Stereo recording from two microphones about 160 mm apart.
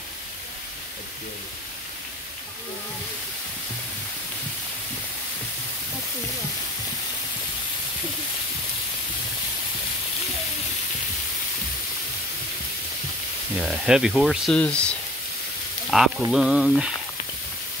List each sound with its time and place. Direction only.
13.6 s speech: 5° right (ahead or behind)